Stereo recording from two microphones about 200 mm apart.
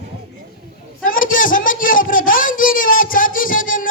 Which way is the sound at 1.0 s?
45° left (ahead or behind).